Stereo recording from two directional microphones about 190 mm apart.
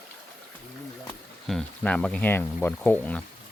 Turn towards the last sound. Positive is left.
turn(degrees=10)  # may be behind; listen again after turning